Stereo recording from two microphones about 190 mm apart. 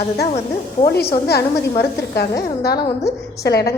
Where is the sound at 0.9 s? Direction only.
55° left (ahead or behind).